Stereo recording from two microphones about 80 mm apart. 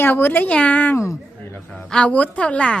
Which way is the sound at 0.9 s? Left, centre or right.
Left.